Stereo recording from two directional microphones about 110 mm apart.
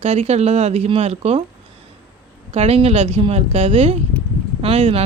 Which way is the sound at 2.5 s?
65° right (ahead or behind).